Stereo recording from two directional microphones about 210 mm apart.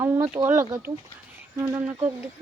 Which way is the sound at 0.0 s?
10° right (ahead or behind).